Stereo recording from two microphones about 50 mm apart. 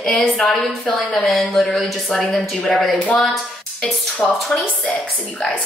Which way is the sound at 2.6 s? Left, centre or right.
Left.